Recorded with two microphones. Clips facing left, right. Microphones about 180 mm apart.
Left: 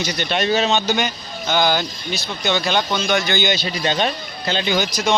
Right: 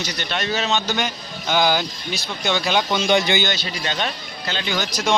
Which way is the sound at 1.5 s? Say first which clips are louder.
Left 1 dB; 5° right (ahead or behind).